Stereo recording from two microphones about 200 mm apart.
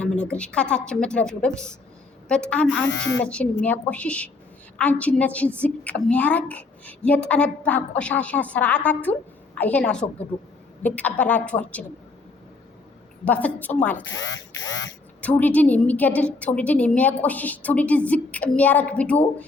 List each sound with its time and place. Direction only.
0.0 s a woman's voice: 5° left (ahead or behind)
13.2 s a woman's voice: 5° left (ahead or behind)
14.0 s a sound: 65° left (ahead or behind)
15.2 s a woman's voice: 5° left (ahead or behind)